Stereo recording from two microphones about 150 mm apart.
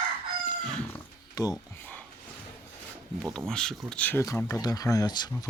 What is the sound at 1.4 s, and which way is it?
Speech, 25° left (ahead or behind).